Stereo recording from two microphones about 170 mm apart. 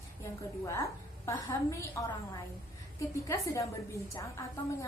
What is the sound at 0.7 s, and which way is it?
A woman's voice, 20° left (ahead or behind).